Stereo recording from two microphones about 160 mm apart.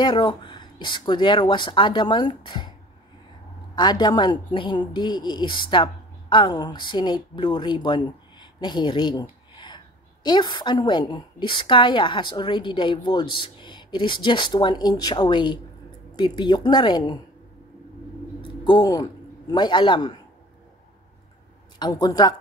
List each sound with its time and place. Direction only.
0.0 s a woman's voice: 30° left (ahead or behind)
3.7 s a woman's voice: 25° left (ahead or behind)
18.4 s a sound: 30° left (ahead or behind)
19.5 s a woman's voice: 30° left (ahead or behind)
21.7 s a woman's voice: 25° left (ahead or behind)